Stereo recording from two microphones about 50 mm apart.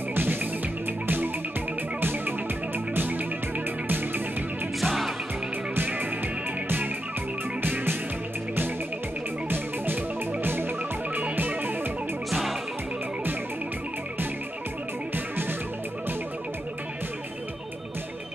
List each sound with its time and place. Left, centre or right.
0.1 s music: right
4.7 s music: centre
5.8 s music: right
7.6 s music: right
10.4 s music: right
12.3 s music: centre